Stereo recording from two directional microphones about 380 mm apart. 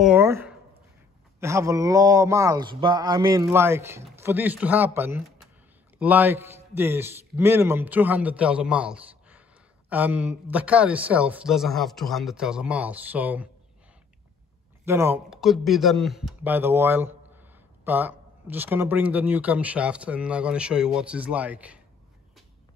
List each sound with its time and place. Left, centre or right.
0.0 s speech: centre
14.9 s speech: centre